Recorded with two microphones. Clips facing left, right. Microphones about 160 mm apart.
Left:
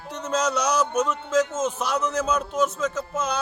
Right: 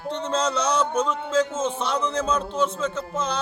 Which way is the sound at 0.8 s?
10° left (ahead or behind).